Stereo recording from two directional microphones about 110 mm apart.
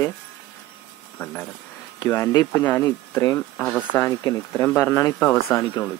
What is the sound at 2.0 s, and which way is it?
Speech, 25° left (ahead or behind).